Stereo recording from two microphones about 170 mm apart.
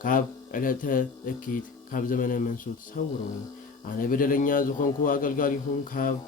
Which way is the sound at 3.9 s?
55° left (ahead or behind).